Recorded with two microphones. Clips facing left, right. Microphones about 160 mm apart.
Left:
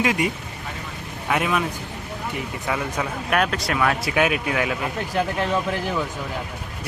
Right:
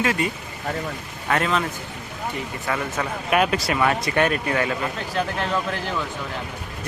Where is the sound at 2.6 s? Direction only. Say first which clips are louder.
Even; 10° left (ahead or behind).